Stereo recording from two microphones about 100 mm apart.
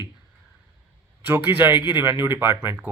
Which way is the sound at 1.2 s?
20° right (ahead or behind).